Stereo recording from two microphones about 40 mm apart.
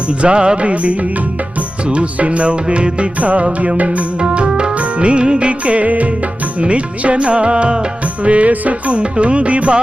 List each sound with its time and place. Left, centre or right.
0.1 s music: right
4.2 s organ: right
4.4 s music: right